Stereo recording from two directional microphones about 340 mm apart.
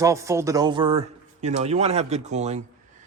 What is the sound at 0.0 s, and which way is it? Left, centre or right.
Speech, centre.